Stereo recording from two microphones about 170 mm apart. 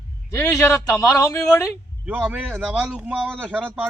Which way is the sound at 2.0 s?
5° right (ahead or behind).